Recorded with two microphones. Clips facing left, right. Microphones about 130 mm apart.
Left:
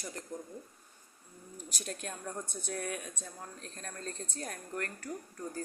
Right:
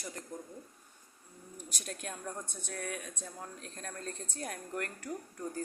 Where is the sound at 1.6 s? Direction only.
Centre (ahead or behind).